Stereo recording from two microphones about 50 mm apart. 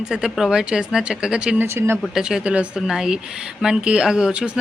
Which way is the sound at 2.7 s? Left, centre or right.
Centre.